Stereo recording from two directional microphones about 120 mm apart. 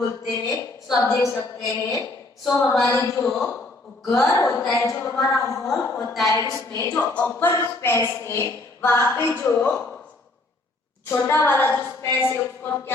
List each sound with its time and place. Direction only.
0.0 s speech: 30° left (ahead or behind)
5.6 s a woman's voice: 5° left (ahead or behind)
6.3 s speech: 25° left (ahead or behind)
7.1 s speech: 15° left (ahead or behind)
11.1 s speech: 20° left (ahead or behind)